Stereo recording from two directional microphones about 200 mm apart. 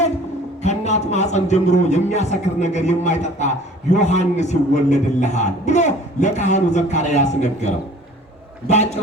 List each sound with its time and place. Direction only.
0.6 s a man's voice: 35° left (ahead or behind)